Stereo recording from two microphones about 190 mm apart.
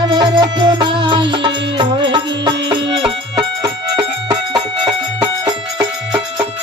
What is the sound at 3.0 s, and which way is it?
Music, 25° right (ahead or behind).